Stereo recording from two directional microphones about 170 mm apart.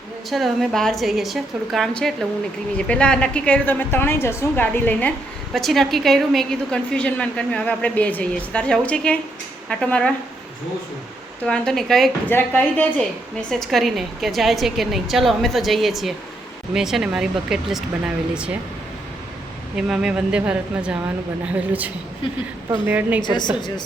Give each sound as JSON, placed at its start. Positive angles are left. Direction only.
{"t": 0.3, "sound": "a woman's voice", "side_deg": 0}
{"t": 11.4, "sound": "a woman's voice", "side_deg": 5}
{"t": 13.5, "sound": "a woman's voice", "side_deg": 0}
{"t": 19.7, "sound": "a woman's voice", "side_deg": -5}
{"t": 23.2, "sound": "a woman's voice", "side_deg": 25}